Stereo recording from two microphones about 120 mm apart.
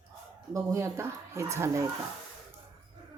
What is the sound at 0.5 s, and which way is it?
Speech, 25° right (ahead or behind).